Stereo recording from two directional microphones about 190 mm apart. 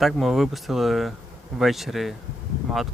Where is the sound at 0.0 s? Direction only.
Centre (ahead or behind).